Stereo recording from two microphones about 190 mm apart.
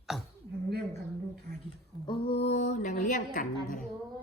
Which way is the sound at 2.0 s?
30° left (ahead or behind).